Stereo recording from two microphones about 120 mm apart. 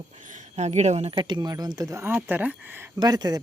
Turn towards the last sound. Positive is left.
turn(degrees=-35)  # may be behind; listen again after turning